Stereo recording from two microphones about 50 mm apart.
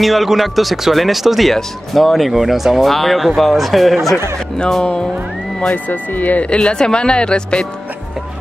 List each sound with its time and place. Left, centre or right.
0.0 s speech: centre
4.6 s a man's voice: centre
5.7 s speech: left; by 7.6 s centre